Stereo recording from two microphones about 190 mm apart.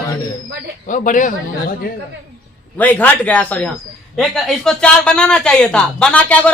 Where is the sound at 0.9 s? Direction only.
45° left (ahead or behind).